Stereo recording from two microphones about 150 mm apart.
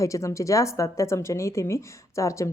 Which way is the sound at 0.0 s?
20° left (ahead or behind).